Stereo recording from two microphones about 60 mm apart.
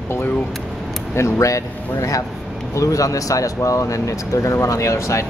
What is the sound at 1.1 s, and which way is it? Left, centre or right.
Speech, left.